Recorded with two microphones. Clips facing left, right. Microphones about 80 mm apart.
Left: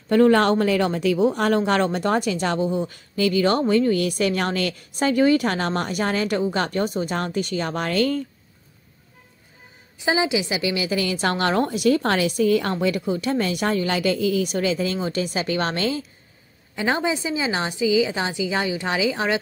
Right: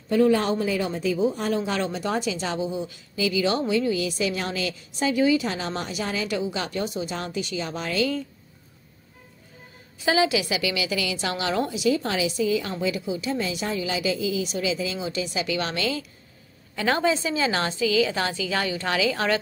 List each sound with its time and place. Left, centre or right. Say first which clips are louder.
0.1 s speech: left 4 dB; left
9.9 s speech: even; left
16.7 s a woman's voice: even; centre